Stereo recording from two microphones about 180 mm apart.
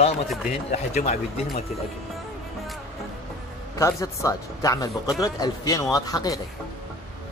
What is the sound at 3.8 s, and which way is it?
Speech, 15° left (ahead or behind).